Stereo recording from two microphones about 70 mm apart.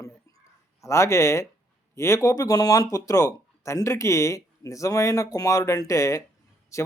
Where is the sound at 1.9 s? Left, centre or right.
Left.